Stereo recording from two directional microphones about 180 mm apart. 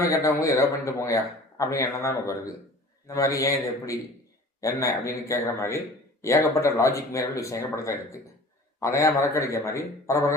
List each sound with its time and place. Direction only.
0.0 s a man's voice: 15° left (ahead or behind)